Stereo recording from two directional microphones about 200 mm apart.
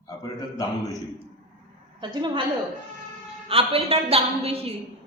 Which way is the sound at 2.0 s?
25° right (ahead or behind).